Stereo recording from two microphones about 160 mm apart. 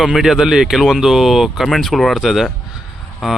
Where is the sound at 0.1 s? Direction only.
Centre (ahead or behind).